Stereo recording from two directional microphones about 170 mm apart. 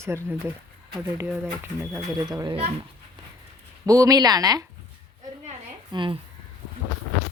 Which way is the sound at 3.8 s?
20° right (ahead or behind).